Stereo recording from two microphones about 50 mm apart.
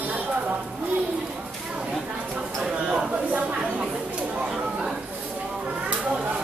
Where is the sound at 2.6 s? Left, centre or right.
Right.